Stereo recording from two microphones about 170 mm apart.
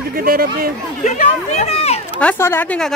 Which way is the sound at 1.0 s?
40° left (ahead or behind).